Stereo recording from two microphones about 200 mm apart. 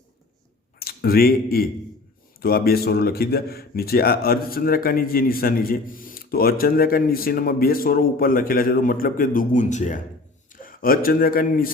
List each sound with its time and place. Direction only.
0.8 s speech: 50° left (ahead or behind)